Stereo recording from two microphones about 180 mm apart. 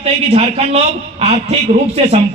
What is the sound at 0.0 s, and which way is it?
Speech, 35° right (ahead or behind).